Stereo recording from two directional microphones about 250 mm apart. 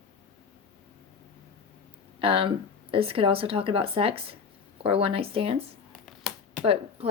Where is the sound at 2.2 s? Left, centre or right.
Right.